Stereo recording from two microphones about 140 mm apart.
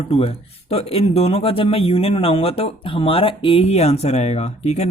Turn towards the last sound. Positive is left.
turn(degrees=50)  # may be behind; listen again after turning